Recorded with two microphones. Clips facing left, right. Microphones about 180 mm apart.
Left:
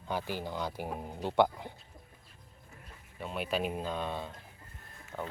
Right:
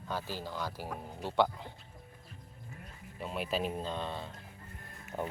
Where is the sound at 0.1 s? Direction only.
15° left (ahead or behind).